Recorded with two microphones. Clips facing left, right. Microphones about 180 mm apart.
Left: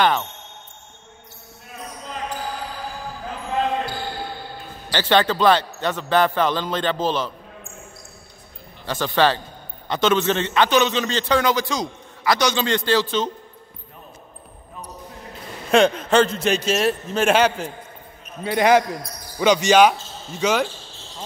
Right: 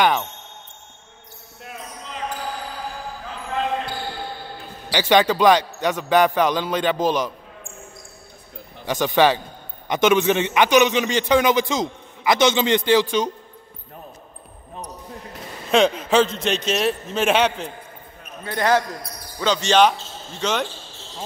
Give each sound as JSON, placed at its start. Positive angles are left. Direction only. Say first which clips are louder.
{"t": 0.0, "sound": "a man's voice", "louder": "even", "side_deg": -10}
{"t": 4.9, "sound": "a man's voice", "louder": "right 2 dB", "side_deg": -10}
{"t": 8.8, "sound": "a man's voice", "louder": "right 2 dB", "side_deg": -15}
{"t": 15.7, "sound": "a man's voice", "louder": "left 1 dB", "side_deg": 0}
{"t": 18.4, "sound": "speech", "louder": "left 3 dB", "side_deg": 15}